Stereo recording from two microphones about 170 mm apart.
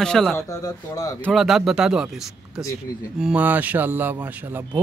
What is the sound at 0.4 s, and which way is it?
Speech, 20° left (ahead or behind).